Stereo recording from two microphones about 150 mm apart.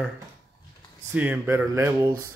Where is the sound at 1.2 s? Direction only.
10° right (ahead or behind).